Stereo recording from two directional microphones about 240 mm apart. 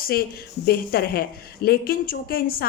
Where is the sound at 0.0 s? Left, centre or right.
Left.